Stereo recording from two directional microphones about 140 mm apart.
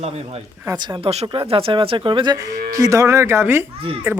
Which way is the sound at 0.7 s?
30° right (ahead or behind).